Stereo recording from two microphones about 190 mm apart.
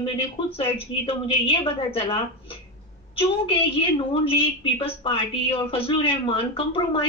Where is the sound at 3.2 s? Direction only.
30° left (ahead or behind).